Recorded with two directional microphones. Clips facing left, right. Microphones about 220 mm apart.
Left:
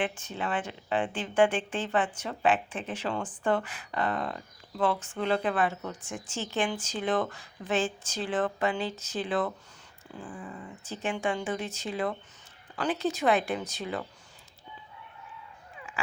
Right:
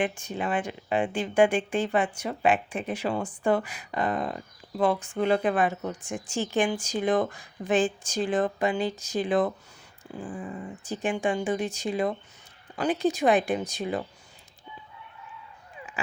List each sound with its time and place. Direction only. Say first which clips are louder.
0.0 s speech: right 3 dB; 15° right (ahead or behind)
10.2 s dog: right 6 dB; 25° right (ahead or behind)
10.8 s speech: right 4 dB; 15° right (ahead or behind)